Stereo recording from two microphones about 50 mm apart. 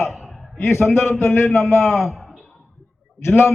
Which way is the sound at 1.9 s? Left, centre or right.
Centre.